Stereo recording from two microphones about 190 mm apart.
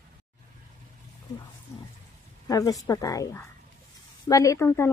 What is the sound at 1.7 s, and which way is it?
A woman's voice, 15° left (ahead or behind).